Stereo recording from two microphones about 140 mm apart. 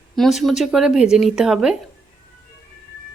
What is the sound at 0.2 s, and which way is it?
A woman's voice, centre (ahead or behind).